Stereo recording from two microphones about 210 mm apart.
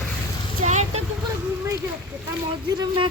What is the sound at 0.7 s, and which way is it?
Speech, 35° right (ahead or behind).